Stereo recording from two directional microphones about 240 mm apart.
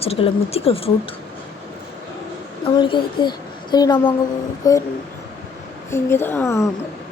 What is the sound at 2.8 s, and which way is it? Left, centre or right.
A woman's voice, centre.